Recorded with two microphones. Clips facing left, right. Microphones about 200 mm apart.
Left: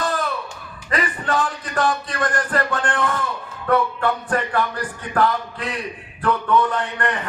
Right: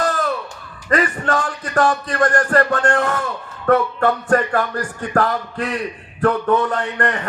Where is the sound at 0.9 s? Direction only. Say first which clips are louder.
Right 5 dB; 45° right (ahead or behind).